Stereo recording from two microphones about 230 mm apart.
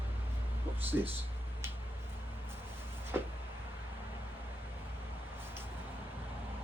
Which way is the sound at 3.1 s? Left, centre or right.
Centre.